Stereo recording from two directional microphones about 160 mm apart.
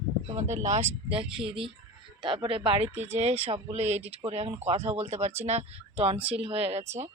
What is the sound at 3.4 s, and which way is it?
Speech, 40° right (ahead or behind).